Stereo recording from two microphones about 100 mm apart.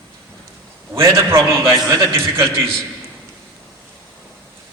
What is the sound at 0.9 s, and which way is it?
A man's voice, 25° right (ahead or behind).